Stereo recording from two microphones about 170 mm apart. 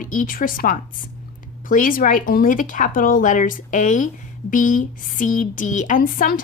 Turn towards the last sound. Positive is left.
turn(degrees=55)  # may be behind; listen again after turning